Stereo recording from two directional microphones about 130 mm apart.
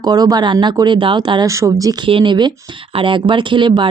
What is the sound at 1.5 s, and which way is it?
Speech, 25° right (ahead or behind).